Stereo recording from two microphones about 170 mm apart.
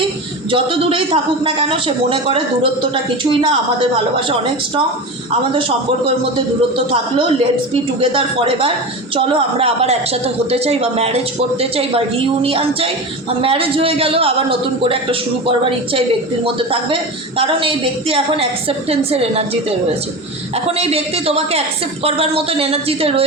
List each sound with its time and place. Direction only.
0.5 s a woman's voice: 35° right (ahead or behind)
20.7 s a woman's voice: 35° right (ahead or behind)